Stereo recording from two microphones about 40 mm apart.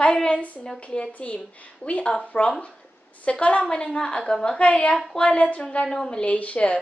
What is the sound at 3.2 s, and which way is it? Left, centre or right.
Speech, left.